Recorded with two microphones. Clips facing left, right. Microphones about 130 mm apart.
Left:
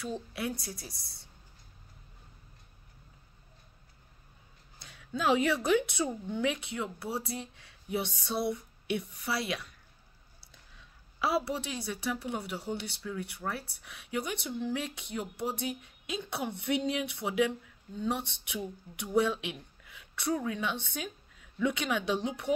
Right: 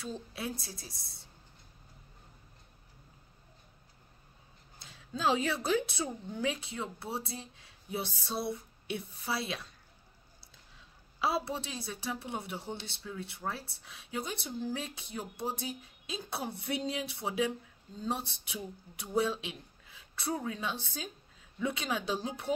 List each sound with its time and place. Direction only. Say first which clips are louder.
0.6 s a woman's voice: left 4 dB; 25° right (ahead or behind)
4.7 s a woman's voice: left 4 dB; 25° right (ahead or behind)
7.5 s a sound: left 3 dB; 25° right (ahead or behind)
8.2 s a woman's voice: left 4 dB; 30° right (ahead or behind)
11.1 s a woman's voice: left 2 dB; 25° right (ahead or behind)